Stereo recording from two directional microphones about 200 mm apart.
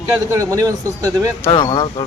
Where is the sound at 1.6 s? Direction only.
25° left (ahead or behind).